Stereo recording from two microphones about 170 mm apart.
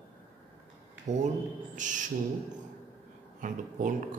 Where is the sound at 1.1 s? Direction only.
40° right (ahead or behind).